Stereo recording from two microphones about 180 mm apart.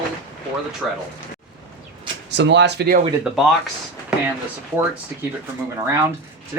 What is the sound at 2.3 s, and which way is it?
Speech, 75° right (ahead or behind).